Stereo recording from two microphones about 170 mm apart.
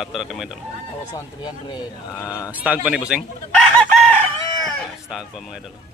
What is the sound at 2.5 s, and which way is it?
Speech, 10° right (ahead or behind).